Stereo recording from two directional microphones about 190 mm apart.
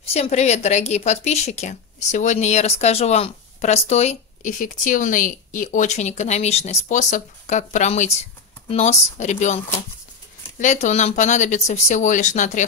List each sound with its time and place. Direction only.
0.1 s speech: 35° left (ahead or behind)
10.6 s speech: 40° left (ahead or behind)